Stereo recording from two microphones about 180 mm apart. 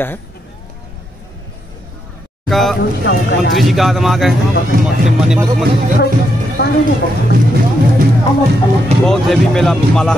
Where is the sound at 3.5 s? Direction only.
Centre (ahead or behind).